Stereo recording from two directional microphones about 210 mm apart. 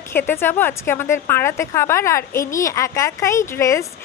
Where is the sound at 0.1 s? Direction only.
10° left (ahead or behind).